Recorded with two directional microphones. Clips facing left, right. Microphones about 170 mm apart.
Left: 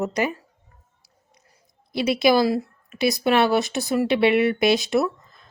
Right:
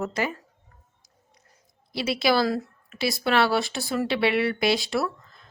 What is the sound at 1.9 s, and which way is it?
A woman's voice, 20° left (ahead or behind).